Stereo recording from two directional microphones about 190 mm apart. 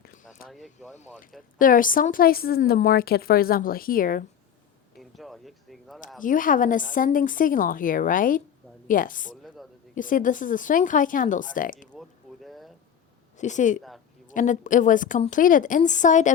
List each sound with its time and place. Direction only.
0.0 s a sound: 50° left (ahead or behind)
0.4 s speech: centre (ahead or behind)
1.5 s a woman's voice: 45° left (ahead or behind)
4.9 s speech: centre (ahead or behind)
6.2 s a woman's voice: 45° left (ahead or behind)
9.3 s a sound: centre (ahead or behind)
9.9 s a woman's voice: 45° left (ahead or behind)
11.9 s a sound: centre (ahead or behind)
13.3 s a woman's voice: 40° left (ahead or behind)